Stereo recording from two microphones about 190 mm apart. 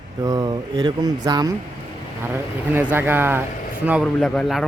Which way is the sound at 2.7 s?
10° right (ahead or behind).